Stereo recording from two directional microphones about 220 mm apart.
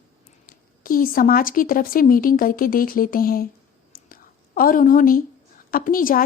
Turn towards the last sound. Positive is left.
turn(degrees=40)  # may be behind; listen again after turning